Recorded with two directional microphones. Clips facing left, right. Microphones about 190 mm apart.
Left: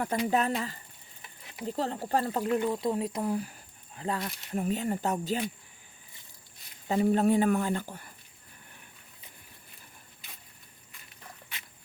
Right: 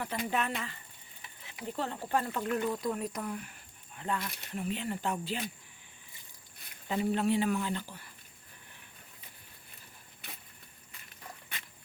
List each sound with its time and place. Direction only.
0.0 s speech: 40° left (ahead or behind)
6.8 s speech: 45° left (ahead or behind)